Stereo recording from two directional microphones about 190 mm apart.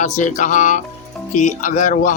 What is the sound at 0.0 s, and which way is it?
Speech, 40° left (ahead or behind).